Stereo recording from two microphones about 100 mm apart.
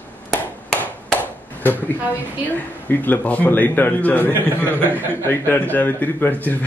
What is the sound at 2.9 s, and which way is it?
A man's voice, 20° left (ahead or behind).